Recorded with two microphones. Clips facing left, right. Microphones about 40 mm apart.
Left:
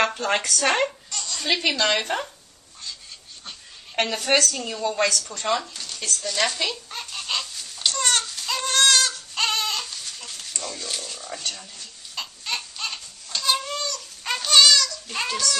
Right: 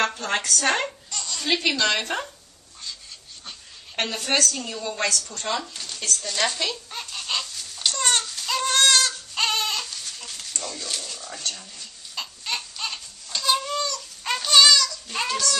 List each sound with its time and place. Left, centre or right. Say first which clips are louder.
0.1 s speech: left 2 dB; left
1.1 s baby laughter: even; centre
1.5 s a woman's voice: even; centre
3.9 s a woman's voice: left 3 dB; left
4.5 s a woman's voice: left 4 dB; centre
5.3 s speech: left 3 dB; left
6.1 s a sound: left 2 dB; centre